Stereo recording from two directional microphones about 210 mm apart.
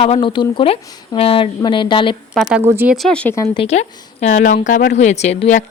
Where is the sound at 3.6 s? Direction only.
30° left (ahead or behind).